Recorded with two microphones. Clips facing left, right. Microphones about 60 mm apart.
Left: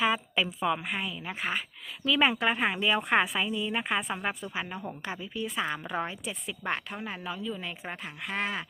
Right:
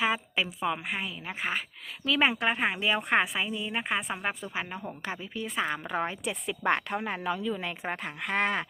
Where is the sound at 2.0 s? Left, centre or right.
Right.